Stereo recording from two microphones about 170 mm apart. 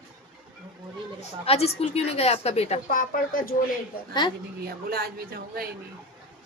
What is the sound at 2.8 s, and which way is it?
Speech, 55° left (ahead or behind).